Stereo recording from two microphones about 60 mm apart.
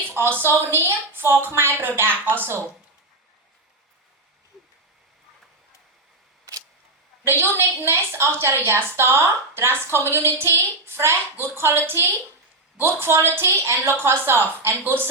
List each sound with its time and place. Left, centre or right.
0.2 s a woman's voice: right
4.5 s a sound: centre
7.3 s a woman's voice: right